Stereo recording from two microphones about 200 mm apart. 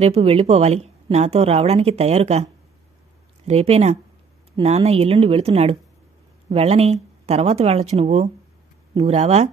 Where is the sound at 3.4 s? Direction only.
30° right (ahead or behind).